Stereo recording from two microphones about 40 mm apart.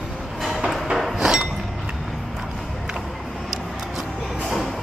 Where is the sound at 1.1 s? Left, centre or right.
Centre.